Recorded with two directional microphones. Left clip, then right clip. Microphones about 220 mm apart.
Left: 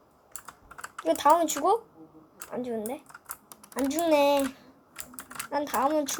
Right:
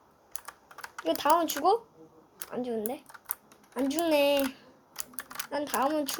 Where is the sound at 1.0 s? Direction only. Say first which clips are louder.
Left 3 dB; 10° right (ahead or behind).